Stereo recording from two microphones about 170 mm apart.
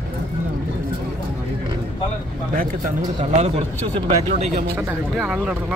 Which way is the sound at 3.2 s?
40° right (ahead or behind).